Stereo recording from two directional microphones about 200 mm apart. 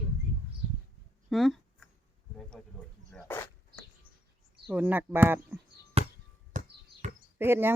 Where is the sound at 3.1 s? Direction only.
10° left (ahead or behind).